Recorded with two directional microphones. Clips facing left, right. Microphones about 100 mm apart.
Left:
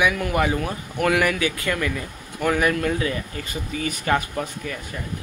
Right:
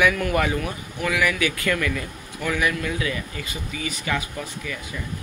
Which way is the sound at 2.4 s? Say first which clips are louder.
Left 4 dB; 45° left (ahead or behind).